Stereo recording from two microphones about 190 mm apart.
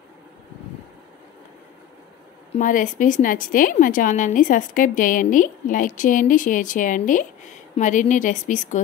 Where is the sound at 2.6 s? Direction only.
45° left (ahead or behind).